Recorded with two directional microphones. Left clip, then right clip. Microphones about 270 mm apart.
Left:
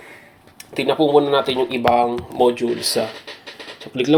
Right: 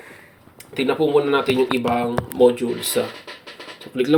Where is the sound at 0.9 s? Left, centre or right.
Left.